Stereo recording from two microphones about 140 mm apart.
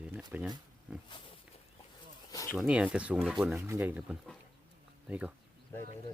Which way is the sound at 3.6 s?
20° right (ahead or behind).